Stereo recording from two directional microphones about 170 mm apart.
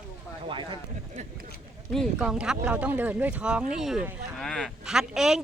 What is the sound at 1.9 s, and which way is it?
Speech, centre (ahead or behind).